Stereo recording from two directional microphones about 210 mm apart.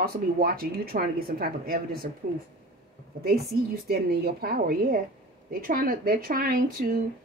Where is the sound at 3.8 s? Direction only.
45° right (ahead or behind).